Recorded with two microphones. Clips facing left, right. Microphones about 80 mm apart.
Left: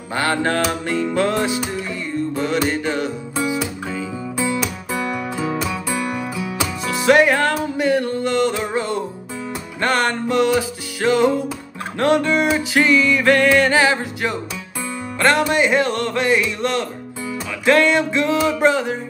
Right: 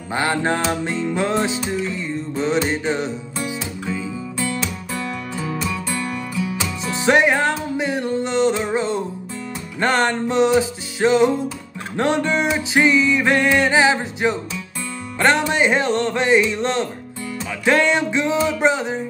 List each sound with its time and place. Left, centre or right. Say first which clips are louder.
0.1 s music: left 1 dB; centre
6.3 s music: even; centre
6.9 s music: left 2 dB; right